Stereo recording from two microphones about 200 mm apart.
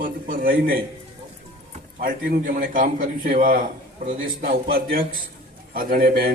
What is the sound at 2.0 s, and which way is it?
A man's voice, 45° right (ahead or behind).